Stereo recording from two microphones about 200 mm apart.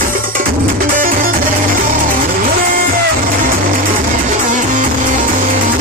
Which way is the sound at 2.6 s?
45° right (ahead or behind).